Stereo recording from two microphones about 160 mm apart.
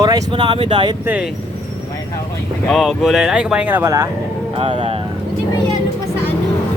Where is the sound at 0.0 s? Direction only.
25° right (ahead or behind).